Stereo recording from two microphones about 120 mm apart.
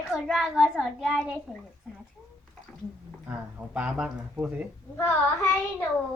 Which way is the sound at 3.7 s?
10° right (ahead or behind).